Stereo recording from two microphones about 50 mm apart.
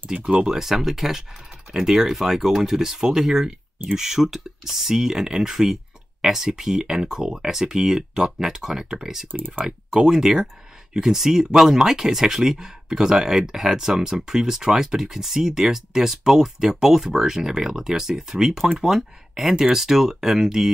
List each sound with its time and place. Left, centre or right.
0.1 s speech: centre